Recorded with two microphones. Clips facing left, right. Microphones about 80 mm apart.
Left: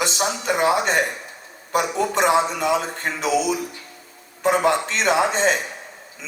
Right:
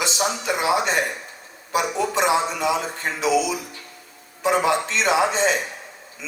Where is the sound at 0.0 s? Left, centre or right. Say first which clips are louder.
Left 1 dB; left.